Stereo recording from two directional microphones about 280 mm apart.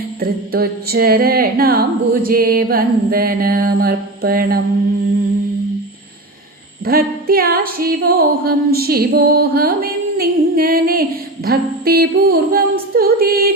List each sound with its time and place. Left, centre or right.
0.2 s music: right
6.8 s music: right